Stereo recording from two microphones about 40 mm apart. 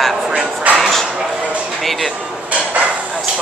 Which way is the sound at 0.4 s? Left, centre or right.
Centre.